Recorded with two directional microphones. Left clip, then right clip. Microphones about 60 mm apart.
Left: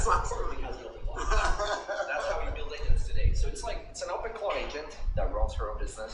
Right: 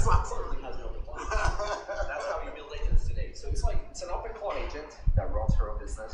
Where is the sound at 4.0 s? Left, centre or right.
Left.